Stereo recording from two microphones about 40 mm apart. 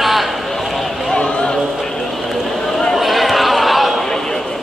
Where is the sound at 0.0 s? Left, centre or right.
Centre.